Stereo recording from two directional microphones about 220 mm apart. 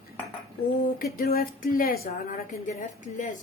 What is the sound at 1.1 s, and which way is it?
A woman's voice, 40° left (ahead or behind).